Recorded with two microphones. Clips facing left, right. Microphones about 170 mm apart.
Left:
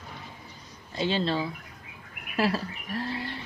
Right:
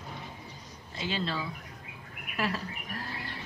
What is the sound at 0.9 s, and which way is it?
Speech, 30° left (ahead or behind).